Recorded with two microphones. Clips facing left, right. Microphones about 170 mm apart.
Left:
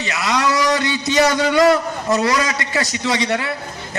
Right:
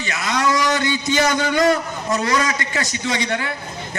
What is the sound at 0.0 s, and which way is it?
A man's voice, 30° left (ahead or behind).